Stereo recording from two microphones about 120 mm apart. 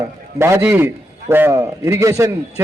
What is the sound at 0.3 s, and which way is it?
A man's voice, 20° right (ahead or behind).